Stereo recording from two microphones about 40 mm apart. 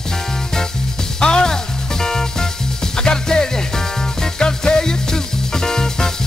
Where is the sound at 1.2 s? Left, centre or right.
Centre.